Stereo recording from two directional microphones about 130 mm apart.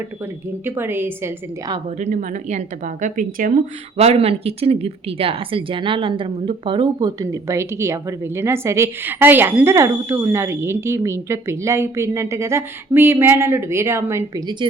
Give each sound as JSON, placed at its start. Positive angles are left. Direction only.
{"t": 0.6, "sound": "a woman's voice", "side_deg": -15}
{"t": 2.0, "sound": "speech", "side_deg": -80}
{"t": 7.2, "sound": "a woman's voice", "side_deg": -20}